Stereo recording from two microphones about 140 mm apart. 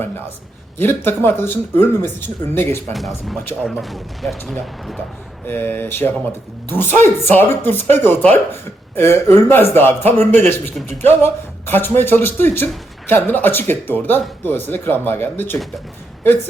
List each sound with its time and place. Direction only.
0.8 s speech: 15° left (ahead or behind)
2.9 s speech: centre (ahead or behind)
5.5 s speech: 15° left (ahead or behind)